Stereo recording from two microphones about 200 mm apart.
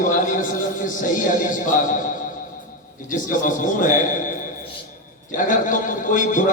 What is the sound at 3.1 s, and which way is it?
A man's voice, 40° left (ahead or behind).